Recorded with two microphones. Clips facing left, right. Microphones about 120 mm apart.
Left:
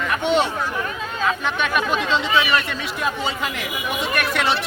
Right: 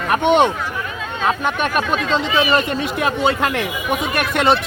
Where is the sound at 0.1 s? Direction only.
55° right (ahead or behind).